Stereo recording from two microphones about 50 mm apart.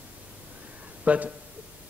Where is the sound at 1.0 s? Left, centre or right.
Right.